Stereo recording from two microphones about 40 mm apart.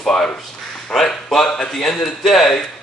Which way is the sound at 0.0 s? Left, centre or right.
Centre.